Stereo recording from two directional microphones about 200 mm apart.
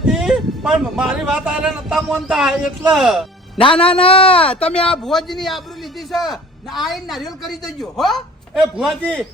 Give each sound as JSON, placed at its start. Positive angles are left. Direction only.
{"t": 0.0, "sound": "speech", "side_deg": 0}
{"t": 3.8, "sound": "a man's voice", "side_deg": 25}
{"t": 4.9, "sound": "a man's voice", "side_deg": 0}